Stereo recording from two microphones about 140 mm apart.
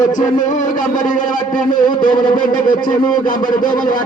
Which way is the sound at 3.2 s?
75° left (ahead or behind).